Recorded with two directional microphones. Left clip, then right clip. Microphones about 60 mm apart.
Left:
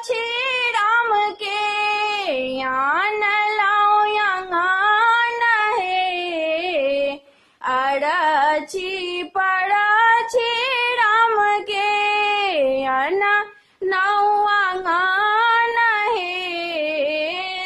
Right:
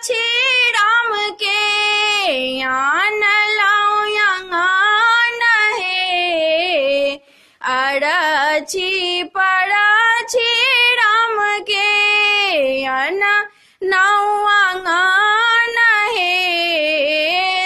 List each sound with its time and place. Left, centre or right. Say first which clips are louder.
0.4 s a sound: right 6 dB; right
3.2 s female singing: right 4 dB; centre
6.4 s music: right 5 dB; right
9.4 s female singing: right 4 dB; centre
11.4 s child singing: right 3 dB; centre
13.8 s female singing: right 4 dB; right